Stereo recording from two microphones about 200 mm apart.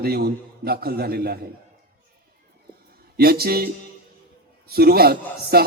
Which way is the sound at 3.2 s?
50° right (ahead or behind).